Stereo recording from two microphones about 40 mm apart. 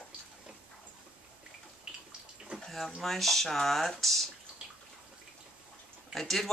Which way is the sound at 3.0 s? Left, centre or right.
Centre.